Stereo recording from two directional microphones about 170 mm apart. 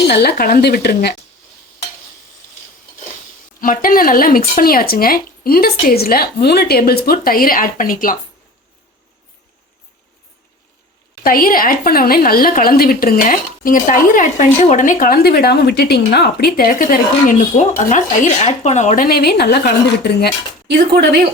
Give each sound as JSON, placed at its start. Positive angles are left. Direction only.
{"t": 0.1, "sound": "a woman's voice", "side_deg": 65}
{"t": 3.6, "sound": "a woman's voice", "side_deg": 55}
{"t": 11.2, "sound": "a woman's voice", "side_deg": 55}
{"t": 19.0, "sound": "speech", "side_deg": 65}
{"t": 20.7, "sound": "speech", "side_deg": -70}